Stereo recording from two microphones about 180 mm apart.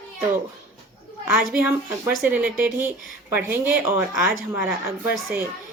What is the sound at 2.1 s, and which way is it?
Speech, 10° right (ahead or behind).